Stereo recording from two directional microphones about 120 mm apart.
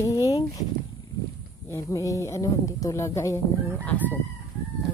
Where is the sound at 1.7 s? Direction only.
25° left (ahead or behind).